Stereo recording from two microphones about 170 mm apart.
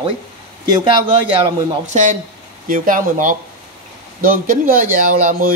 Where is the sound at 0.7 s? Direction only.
30° right (ahead or behind).